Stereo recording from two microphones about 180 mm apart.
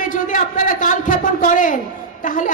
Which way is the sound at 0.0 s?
45° left (ahead or behind).